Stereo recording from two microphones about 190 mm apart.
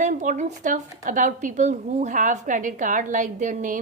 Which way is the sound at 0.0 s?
40° right (ahead or behind).